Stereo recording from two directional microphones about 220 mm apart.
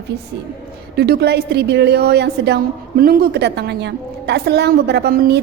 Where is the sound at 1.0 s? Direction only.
45° right (ahead or behind).